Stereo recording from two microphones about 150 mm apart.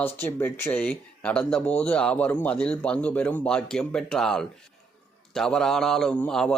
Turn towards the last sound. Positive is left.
turn(degrees=5)  # may be behind; listen again after turning